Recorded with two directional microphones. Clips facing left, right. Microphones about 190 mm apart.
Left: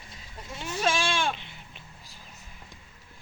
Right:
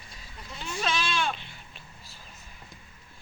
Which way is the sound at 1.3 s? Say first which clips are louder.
Left 1 dB; 20° left (ahead or behind).